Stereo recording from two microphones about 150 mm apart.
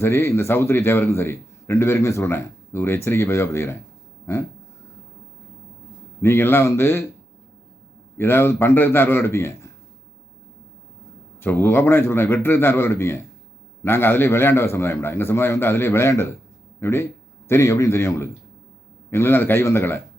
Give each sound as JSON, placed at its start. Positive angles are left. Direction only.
{"t": 0.0, "sound": "a man's voice", "side_deg": 15}
{"t": 6.2, "sound": "a man's voice", "side_deg": 15}
{"t": 8.2, "sound": "a man's voice", "side_deg": 15}
{"t": 11.3, "sound": "a man's voice", "side_deg": 15}